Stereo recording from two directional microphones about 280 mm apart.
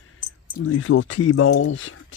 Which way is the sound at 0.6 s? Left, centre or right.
Left.